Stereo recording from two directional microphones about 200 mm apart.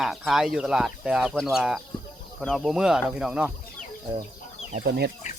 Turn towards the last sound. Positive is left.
turn(degrees=-55)  # may be behind; listen again after turning